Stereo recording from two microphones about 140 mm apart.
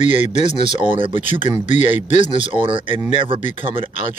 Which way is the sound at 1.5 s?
55° left (ahead or behind).